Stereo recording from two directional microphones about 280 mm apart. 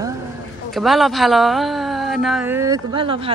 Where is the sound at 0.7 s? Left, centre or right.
Centre.